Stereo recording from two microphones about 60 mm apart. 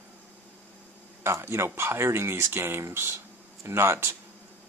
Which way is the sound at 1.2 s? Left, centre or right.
Right.